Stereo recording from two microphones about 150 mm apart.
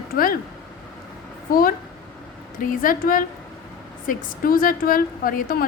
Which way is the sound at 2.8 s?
65° left (ahead or behind).